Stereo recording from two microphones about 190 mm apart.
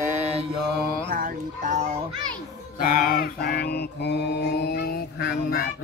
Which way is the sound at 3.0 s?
50° left (ahead or behind).